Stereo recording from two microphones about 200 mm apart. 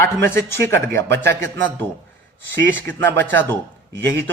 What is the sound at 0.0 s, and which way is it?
A man's voice, 15° left (ahead or behind).